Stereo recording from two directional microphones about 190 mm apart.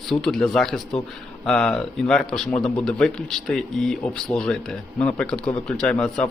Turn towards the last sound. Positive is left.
turn(degrees=5)  # may be behind; listen again after turning